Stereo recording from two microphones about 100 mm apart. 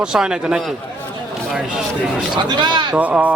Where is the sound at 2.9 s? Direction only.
15° right (ahead or behind).